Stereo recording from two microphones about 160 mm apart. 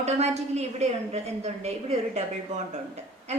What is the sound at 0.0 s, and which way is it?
Speech, 45° right (ahead or behind).